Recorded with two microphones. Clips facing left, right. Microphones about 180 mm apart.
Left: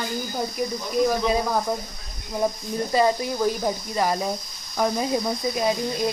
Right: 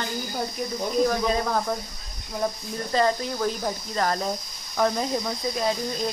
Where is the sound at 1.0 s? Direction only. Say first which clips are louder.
Left 2 dB; 10° left (ahead or behind).